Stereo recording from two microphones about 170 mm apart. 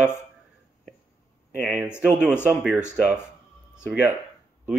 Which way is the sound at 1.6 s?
5° right (ahead or behind).